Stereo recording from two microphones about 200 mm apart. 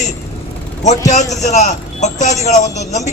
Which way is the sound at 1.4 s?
35° left (ahead or behind).